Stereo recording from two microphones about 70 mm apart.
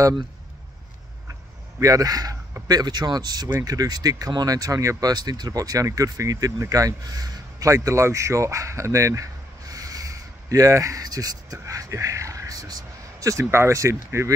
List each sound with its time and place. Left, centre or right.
1.8 s speech: right
2.7 s speech: right
5.1 s a man's voice: right